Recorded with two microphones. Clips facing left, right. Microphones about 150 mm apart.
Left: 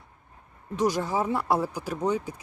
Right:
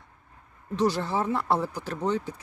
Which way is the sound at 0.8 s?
10° left (ahead or behind).